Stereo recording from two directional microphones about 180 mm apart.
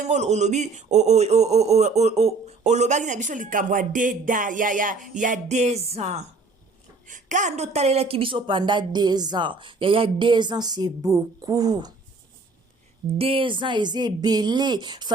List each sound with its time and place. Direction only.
0.0 s a sound: 40° right (ahead or behind)
7.1 s a woman's voice: 45° right (ahead or behind); by 11.9 s 20° right (ahead or behind)
13.1 s a woman's voice: 30° right (ahead or behind)